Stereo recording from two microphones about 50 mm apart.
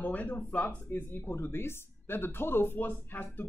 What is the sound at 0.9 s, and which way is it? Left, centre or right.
Speech, left.